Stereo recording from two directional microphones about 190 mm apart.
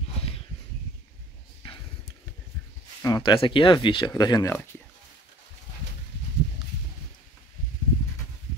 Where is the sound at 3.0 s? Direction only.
20° left (ahead or behind).